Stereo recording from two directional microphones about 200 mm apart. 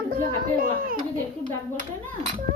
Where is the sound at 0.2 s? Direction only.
45° right (ahead or behind).